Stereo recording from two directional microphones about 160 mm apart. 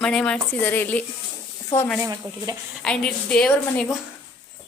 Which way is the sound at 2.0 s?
25° right (ahead or behind).